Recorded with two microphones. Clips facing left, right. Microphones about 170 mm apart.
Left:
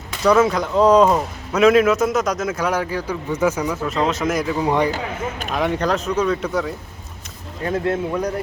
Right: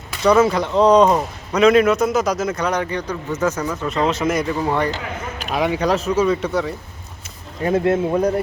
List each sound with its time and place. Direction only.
0.2 s speech: centre (ahead or behind)
4.6 s speech: 15° left (ahead or behind)
5.5 s speech: 5° right (ahead or behind)
7.6 s speech: 20° right (ahead or behind)